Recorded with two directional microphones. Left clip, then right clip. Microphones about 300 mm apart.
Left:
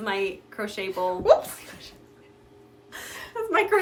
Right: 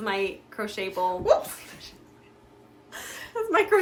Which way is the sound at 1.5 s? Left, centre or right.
Centre.